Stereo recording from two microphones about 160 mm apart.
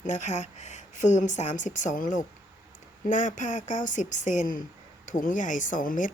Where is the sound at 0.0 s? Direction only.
50° left (ahead or behind).